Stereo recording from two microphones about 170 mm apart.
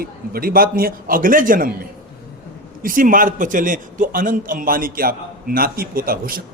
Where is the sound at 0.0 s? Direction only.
60° right (ahead or behind).